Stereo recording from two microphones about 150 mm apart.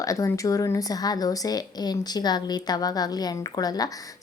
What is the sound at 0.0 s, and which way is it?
A woman's voice, 20° left (ahead or behind).